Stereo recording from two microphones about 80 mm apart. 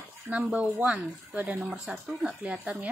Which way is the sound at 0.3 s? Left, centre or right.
Centre.